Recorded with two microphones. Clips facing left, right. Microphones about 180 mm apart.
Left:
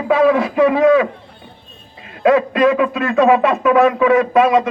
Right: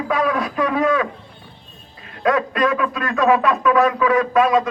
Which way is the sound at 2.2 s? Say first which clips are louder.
Left 6 dB; 25° left (ahead or behind).